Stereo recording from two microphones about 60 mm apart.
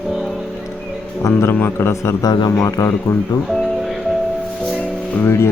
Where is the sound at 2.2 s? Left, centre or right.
Left.